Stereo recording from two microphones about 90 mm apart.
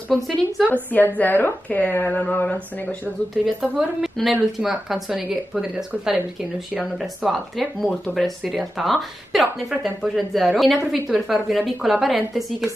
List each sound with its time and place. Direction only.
0.6 s speech: centre (ahead or behind)
0.9 s a woman's voice: 20° left (ahead or behind)
3.4 s speech: centre (ahead or behind)